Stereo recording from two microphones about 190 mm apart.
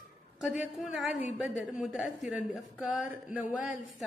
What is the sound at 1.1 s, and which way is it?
Speech, 40° left (ahead or behind).